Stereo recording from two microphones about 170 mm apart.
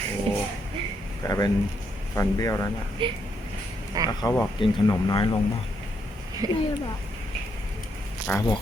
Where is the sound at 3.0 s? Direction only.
30° right (ahead or behind).